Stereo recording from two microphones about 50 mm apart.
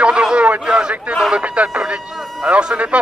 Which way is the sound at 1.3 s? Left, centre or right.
Right.